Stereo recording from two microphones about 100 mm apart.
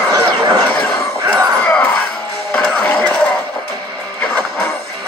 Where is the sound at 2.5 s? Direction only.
10° left (ahead or behind).